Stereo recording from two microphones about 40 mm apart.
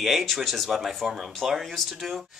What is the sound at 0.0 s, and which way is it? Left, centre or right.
Speech, centre.